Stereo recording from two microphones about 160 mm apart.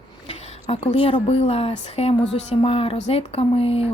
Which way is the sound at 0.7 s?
35° left (ahead or behind).